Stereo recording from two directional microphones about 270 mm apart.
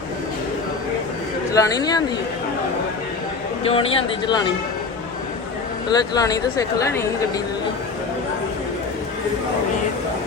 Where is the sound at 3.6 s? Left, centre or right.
Left.